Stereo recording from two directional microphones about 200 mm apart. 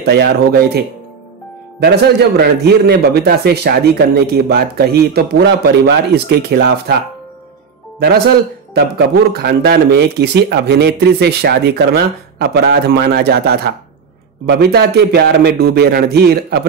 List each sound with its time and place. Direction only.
0.0 s a man's voice: 55° right (ahead or behind)
8.7 s a man's voice: 55° right (ahead or behind)